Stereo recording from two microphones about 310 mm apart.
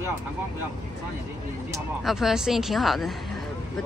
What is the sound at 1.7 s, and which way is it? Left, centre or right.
Speech, centre.